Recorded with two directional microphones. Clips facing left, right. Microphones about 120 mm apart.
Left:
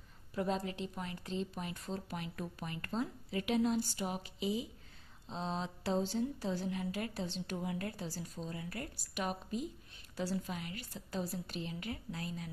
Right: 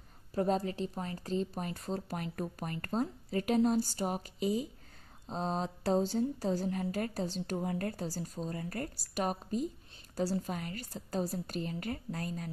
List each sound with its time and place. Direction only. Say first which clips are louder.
0.3 s a woman's voice: right 5 dB; 40° right (ahead or behind)